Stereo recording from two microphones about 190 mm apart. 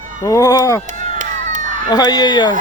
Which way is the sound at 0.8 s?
40° right (ahead or behind).